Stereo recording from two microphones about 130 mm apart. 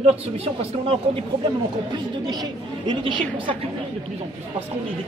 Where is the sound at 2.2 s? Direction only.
35° right (ahead or behind).